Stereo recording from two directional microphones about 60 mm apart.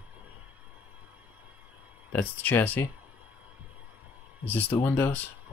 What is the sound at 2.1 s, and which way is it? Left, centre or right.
Speech, left.